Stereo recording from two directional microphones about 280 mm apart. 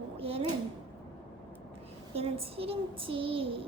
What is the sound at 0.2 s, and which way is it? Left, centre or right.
Speech, right.